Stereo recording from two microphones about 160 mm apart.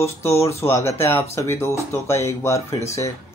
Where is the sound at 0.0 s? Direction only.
15° left (ahead or behind).